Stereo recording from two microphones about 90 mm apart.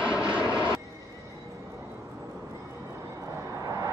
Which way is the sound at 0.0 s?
15° right (ahead or behind).